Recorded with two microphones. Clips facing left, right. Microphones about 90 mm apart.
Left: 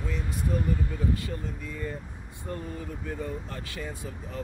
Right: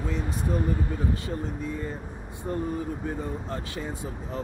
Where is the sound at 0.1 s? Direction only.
25° right (ahead or behind).